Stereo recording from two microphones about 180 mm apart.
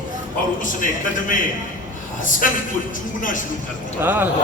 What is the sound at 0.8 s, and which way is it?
Speech, 45° left (ahead or behind).